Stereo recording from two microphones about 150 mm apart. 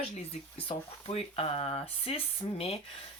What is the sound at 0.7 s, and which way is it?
Speech, 40° left (ahead or behind).